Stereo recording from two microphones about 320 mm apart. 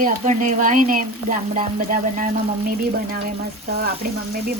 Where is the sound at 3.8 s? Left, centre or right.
Right.